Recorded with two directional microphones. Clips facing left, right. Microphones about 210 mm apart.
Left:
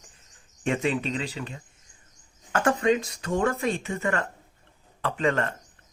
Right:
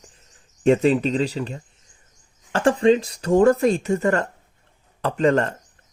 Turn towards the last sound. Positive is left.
turn(degrees=-40)  # may be behind; listen again after turning